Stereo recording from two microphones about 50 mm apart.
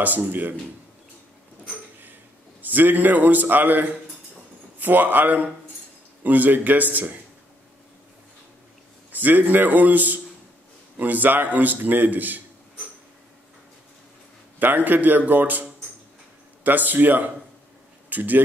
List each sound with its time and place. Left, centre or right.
0.0 s a man's voice: right
2.6 s a man's voice: right
9.1 s a man's voice: right
14.6 s a man's voice: right